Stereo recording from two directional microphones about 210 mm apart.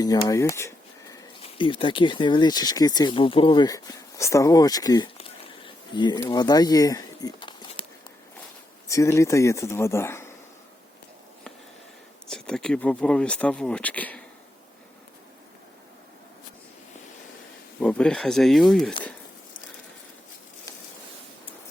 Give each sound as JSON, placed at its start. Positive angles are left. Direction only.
{"t": 0.0, "sound": "speech", "side_deg": 20}
{"t": 1.1, "sound": "speech", "side_deg": 25}
{"t": 5.6, "sound": "a sound", "side_deg": 20}
{"t": 8.9, "sound": "speech", "side_deg": 15}
{"t": 12.3, "sound": "speech", "side_deg": 5}
{"t": 17.7, "sound": "speech", "side_deg": 5}